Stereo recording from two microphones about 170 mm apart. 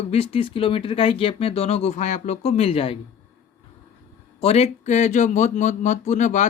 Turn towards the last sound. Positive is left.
turn(degrees=45)  # may be behind; listen again after turning